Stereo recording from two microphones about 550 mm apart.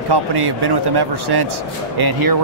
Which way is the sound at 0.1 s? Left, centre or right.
Right.